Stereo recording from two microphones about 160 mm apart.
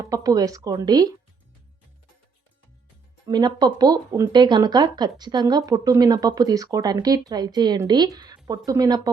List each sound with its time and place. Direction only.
0.0 s speech: 20° right (ahead or behind)
3.2 s speech: 25° right (ahead or behind)